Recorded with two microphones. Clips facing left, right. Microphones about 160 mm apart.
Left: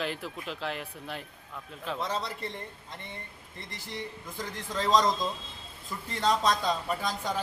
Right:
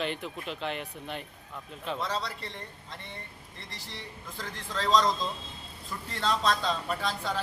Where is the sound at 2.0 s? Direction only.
20° left (ahead or behind).